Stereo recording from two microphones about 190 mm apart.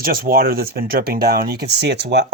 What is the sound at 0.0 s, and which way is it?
Speech, 50° right (ahead or behind).